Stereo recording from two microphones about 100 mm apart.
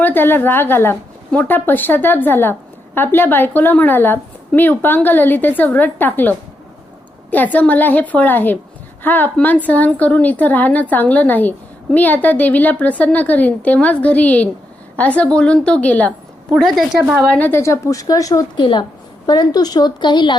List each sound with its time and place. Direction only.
0.0 s a woman's voice: 20° left (ahead or behind); by 17.0 s centre (ahead or behind)
17.3 s a woman's voice: 15° left (ahead or behind)
17.6 s a woman's voice: 30° left (ahead or behind)
18.5 s a woman's voice: 50° left (ahead or behind)